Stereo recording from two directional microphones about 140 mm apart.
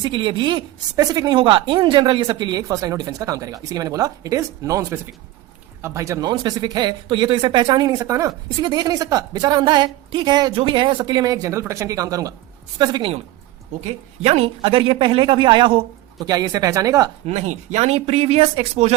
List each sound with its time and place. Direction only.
0.0 s speech: 35° right (ahead or behind)
14.2 s speech: 45° right (ahead or behind); by 17.1 s 25° right (ahead or behind)
17.2 s speech: 55° right (ahead or behind)